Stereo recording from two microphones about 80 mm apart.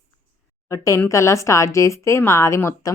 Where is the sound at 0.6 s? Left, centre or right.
Left.